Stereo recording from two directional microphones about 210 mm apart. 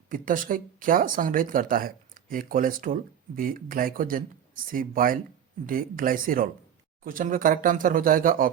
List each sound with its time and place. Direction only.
0.1 s speech: 40° right (ahead or behind)